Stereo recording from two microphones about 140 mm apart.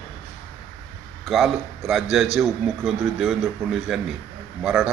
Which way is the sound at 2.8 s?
Centre (ahead or behind).